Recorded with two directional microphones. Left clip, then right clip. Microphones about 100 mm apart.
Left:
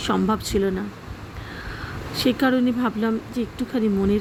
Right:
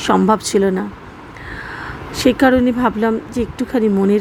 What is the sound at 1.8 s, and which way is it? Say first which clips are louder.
Speech: right 7 dB; 25° right (ahead or behind).